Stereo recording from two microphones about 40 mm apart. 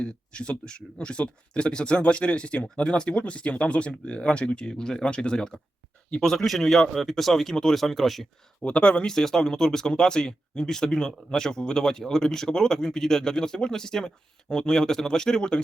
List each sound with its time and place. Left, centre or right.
0.0 s speech: left
4.7 s speech: centre
6.4 s speech: centre
8.6 s speech: left
9.0 s speech: centre